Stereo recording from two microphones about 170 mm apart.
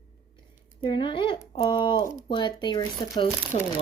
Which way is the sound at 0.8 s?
30° left (ahead or behind).